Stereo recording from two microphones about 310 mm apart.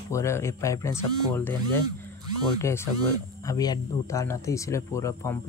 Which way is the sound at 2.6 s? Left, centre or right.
Centre.